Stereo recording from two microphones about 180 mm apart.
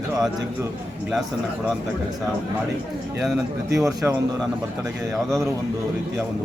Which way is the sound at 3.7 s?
15° right (ahead or behind).